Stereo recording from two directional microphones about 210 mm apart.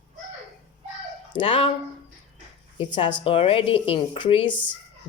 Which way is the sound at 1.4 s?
25° left (ahead or behind).